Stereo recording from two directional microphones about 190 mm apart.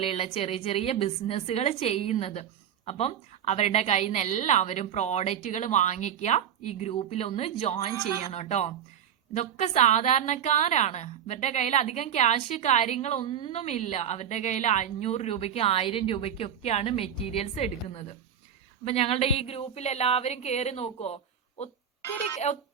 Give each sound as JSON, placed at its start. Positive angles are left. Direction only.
{"t": 0.0, "sound": "a woman's voice", "side_deg": 30}
{"t": 22.0, "sound": "speech", "side_deg": 15}